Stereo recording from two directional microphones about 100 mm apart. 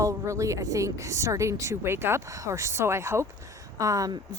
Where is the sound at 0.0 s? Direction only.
30° right (ahead or behind).